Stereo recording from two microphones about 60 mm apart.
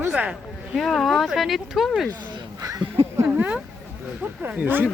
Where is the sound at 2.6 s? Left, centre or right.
Right.